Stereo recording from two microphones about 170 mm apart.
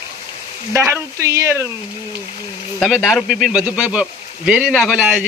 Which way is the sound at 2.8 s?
Centre (ahead or behind).